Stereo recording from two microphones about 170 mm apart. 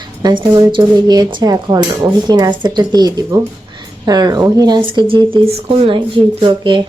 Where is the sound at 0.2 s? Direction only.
25° right (ahead or behind).